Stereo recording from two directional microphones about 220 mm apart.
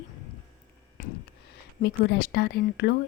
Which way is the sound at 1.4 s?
50° left (ahead or behind).